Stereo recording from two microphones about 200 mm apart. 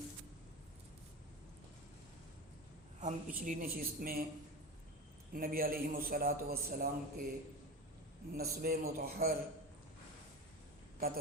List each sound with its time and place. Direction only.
3.0 s a man's voice: 40° right (ahead or behind)
5.3 s a man's voice: 45° right (ahead or behind)
8.3 s a man's voice: 50° right (ahead or behind)